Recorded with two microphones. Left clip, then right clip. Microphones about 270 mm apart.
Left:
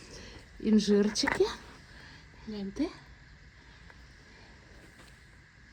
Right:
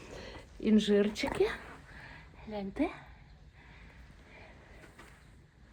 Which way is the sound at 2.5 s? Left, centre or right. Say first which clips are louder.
Right 1 dB; centre.